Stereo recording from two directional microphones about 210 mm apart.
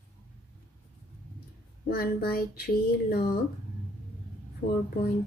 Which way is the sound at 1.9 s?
45° left (ahead or behind).